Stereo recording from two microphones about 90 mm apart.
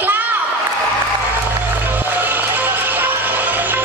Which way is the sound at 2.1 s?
20° right (ahead or behind).